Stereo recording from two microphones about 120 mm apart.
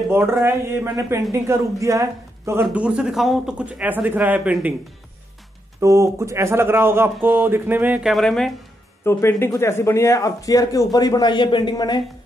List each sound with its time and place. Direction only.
0.1 s speech: 20° right (ahead or behind)
2.7 s speech: 10° right (ahead or behind)
5.8 s speech: 25° right (ahead or behind)
8.0 s speech: centre (ahead or behind)
9.0 s speech: 20° left (ahead or behind)